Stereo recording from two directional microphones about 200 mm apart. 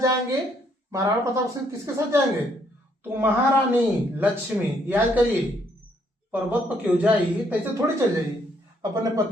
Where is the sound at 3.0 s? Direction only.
10° right (ahead or behind).